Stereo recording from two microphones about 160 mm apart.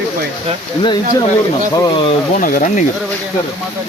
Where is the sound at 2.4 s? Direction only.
60° left (ahead or behind).